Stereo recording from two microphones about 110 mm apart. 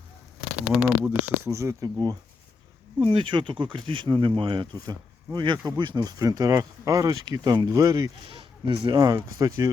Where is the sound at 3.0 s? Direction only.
50° right (ahead or behind); by 8.1 s 35° right (ahead or behind).